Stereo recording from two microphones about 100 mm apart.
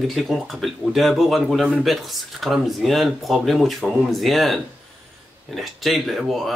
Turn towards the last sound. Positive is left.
turn(degrees=0)  # may be behind; listen again after turning